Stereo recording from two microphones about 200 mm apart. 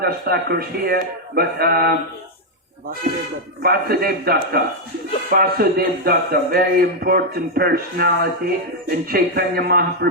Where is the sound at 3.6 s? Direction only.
50° right (ahead or behind).